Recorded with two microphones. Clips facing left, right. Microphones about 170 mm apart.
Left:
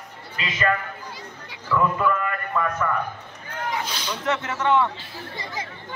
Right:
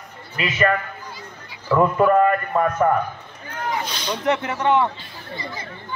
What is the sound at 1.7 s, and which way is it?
A man's voice, 45° right (ahead or behind).